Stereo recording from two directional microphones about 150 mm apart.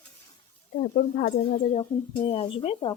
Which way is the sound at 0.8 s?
80° left.